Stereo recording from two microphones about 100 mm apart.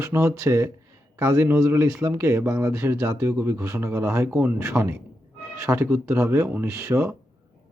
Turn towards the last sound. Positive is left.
turn(degrees=-25)  # may be behind; listen again after turning